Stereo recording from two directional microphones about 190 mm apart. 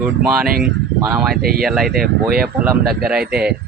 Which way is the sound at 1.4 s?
50° right (ahead or behind).